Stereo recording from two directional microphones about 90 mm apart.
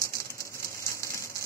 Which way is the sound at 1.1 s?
35° left (ahead or behind).